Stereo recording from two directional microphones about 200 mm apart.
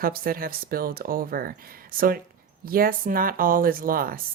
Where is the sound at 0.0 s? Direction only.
45° right (ahead or behind).